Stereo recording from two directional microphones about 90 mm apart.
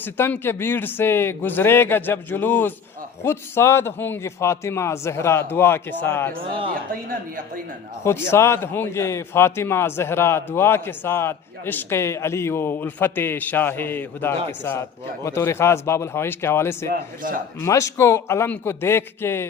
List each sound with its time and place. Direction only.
0.0 s a man's voice: 25° left (ahead or behind)
8.0 s a man's voice: 30° left (ahead or behind)